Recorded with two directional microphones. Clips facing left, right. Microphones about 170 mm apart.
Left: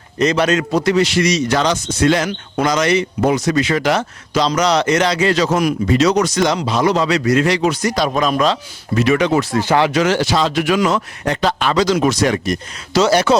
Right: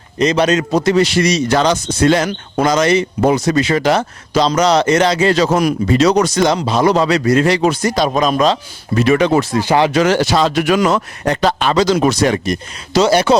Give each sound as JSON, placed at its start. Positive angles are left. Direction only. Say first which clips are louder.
{"t": 0.2, "sound": "speech", "louder": "right 2 dB", "side_deg": -20}
{"t": 0.9, "sound": "speech", "louder": "right 2 dB", "side_deg": -35}
{"t": 9.0, "sound": "speech", "louder": "right 2 dB", "side_deg": -30}
{"t": 9.5, "sound": "speech", "louder": "right 2 dB", "side_deg": -15}
{"t": 9.9, "sound": "speech", "louder": "right 2 dB", "side_deg": -40}
{"t": 11.6, "sound": "speech", "louder": "right 1 dB", "side_deg": -25}